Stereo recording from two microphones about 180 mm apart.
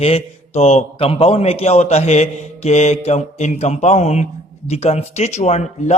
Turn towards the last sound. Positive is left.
turn(degrees=40)  # may be behind; listen again after turning